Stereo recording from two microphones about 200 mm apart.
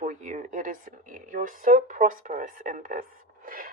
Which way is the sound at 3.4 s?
45° right (ahead or behind).